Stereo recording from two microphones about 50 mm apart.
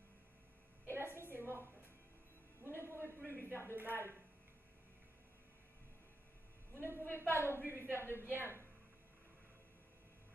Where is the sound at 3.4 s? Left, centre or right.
Right.